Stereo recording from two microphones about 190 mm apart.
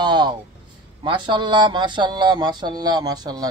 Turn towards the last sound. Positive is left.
turn(degrees=-20)  # may be behind; listen again after turning